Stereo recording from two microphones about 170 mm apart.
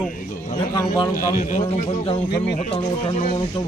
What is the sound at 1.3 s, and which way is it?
Speech, 50° left (ahead or behind).